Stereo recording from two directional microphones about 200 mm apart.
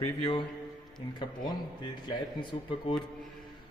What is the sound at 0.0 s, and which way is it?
Speech, 25° left (ahead or behind).